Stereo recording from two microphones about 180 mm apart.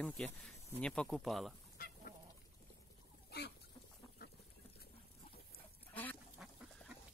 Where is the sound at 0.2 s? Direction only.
5° left (ahead or behind).